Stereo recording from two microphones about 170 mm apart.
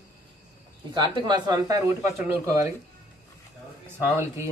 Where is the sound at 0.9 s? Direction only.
25° right (ahead or behind).